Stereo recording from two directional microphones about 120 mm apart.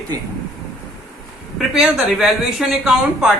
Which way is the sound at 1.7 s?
5° right (ahead or behind).